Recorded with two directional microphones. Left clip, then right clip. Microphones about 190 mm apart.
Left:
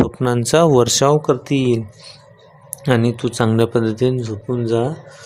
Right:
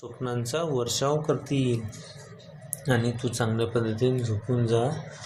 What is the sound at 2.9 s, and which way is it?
Speech, 40° left (ahead or behind).